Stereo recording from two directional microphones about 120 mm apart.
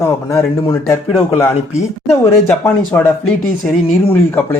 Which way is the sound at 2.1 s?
20° left (ahead or behind).